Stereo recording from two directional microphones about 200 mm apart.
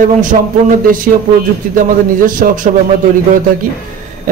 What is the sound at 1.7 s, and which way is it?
Speech, 45° right (ahead or behind).